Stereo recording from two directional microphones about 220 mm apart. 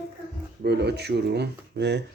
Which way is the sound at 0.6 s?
50° right (ahead or behind).